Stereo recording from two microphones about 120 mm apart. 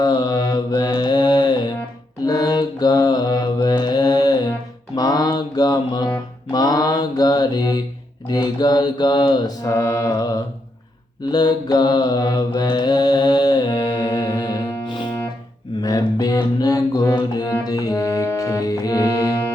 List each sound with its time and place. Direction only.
0.0 s mantra: 35° left (ahead or behind)
9.6 s mantra: 25° left (ahead or behind)
15.8 s music: 30° left (ahead or behind)